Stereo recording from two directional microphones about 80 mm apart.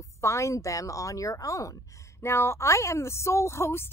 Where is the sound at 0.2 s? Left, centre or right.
Left.